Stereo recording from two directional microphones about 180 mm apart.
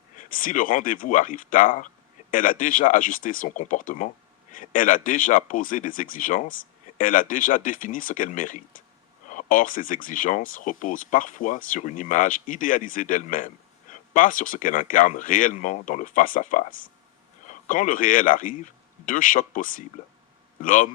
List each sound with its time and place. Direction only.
0.2 s a man's voice: 50° left (ahead or behind)